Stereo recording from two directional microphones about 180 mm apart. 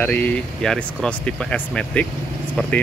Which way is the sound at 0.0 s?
10° left (ahead or behind).